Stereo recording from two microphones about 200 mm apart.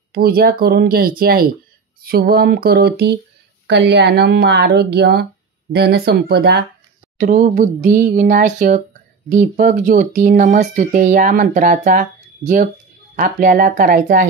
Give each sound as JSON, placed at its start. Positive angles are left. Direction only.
{"t": 0.1, "sound": "speech", "side_deg": -50}
{"t": 7.2, "sound": "speech", "side_deg": -40}